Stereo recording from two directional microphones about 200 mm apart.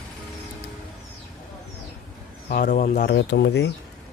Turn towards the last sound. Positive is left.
turn(degrees=55)  # may be behind; listen again after turning